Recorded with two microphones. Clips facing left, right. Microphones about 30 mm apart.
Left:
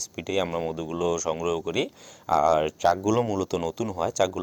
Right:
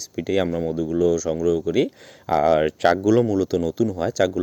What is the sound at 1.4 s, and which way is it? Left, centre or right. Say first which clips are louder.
Speech: right 6 dB; centre.